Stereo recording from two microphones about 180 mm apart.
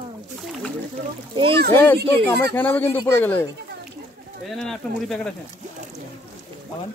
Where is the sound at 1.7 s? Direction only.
15° left (ahead or behind).